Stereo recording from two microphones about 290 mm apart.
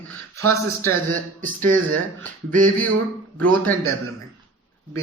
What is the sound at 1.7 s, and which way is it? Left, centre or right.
Speech, right.